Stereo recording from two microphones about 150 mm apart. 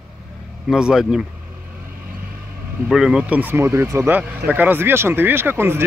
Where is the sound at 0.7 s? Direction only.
5° right (ahead or behind).